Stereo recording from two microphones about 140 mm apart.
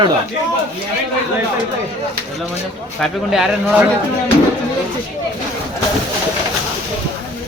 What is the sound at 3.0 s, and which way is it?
Speech, centre (ahead or behind).